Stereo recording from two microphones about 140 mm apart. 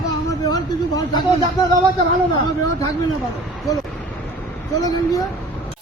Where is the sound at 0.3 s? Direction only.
30° left (ahead or behind).